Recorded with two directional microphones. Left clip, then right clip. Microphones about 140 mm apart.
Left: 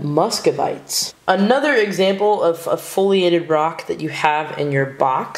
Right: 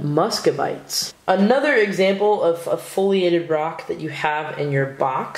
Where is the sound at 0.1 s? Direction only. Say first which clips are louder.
Left 2 dB; 5° left (ahead or behind).